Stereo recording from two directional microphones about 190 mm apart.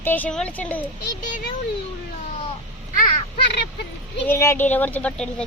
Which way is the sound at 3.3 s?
60° left (ahead or behind).